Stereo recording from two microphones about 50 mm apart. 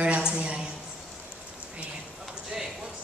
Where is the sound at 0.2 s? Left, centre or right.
Right.